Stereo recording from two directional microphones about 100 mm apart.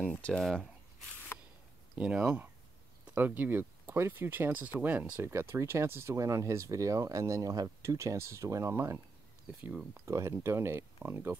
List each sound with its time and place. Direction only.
0.1 s speech: 10° left (ahead or behind)
2.0 s speech: 10° right (ahead or behind)
5.3 s speech: 25° right (ahead or behind)
9.5 s speech: 15° right (ahead or behind)
10.0 s speech: 30° right (ahead or behind)